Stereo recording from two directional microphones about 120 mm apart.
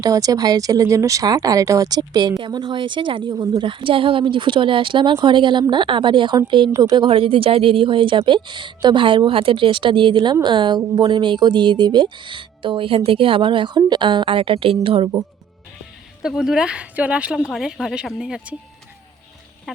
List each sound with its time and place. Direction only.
0.0 s speech: 30° right (ahead or behind); by 15.1 s 45° right (ahead or behind)
16.2 s a woman's voice: 5° right (ahead or behind)
19.7 s a sound: 5° right (ahead or behind)